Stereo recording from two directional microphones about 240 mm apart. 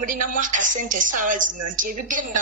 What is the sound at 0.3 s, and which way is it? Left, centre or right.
Speech, right.